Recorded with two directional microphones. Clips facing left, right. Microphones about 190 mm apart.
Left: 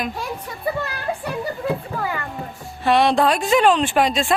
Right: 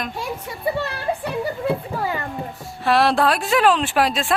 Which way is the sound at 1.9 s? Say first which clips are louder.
Right 1 dB; 25° right (ahead or behind).